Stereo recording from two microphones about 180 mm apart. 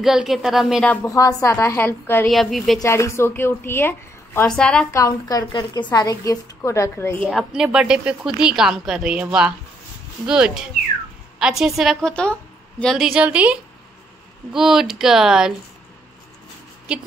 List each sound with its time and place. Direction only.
0.0 s a woman's voice: centre (ahead or behind)
1.0 s a woman's voice: 15° left (ahead or behind)
2.2 s a woman's voice: centre (ahead or behind)
2.8 s a woman's voice: 15° left (ahead or behind)
4.9 s a woman's voice: 20° left (ahead or behind)
7.2 s a woman's voice: centre (ahead or behind)